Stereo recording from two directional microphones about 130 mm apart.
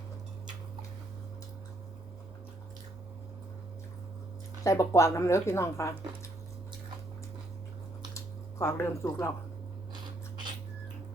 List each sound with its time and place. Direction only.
4.6 s a woman's voice: 25° left (ahead or behind)
8.1 s drip: 20° left (ahead or behind)